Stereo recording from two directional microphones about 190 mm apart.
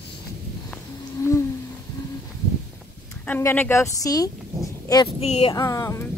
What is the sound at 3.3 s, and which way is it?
A woman's voice, 10° left (ahead or behind).